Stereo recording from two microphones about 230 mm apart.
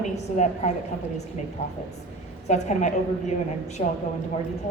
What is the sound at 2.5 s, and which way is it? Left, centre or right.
Speech, left.